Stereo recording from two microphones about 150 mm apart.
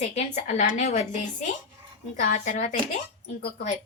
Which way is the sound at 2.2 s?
60° left (ahead or behind).